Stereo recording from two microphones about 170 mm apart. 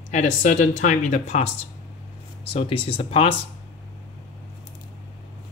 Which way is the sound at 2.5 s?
30° left (ahead or behind).